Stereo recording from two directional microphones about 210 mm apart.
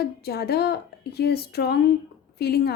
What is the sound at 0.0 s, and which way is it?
Speech, 50° left (ahead or behind).